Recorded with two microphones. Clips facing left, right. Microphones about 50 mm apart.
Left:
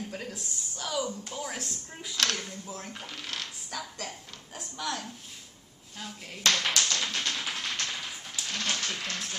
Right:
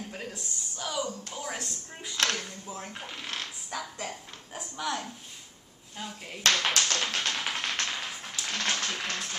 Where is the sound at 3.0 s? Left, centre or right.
Right.